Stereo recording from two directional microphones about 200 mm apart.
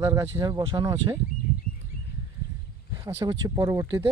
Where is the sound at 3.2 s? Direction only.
20° right (ahead or behind).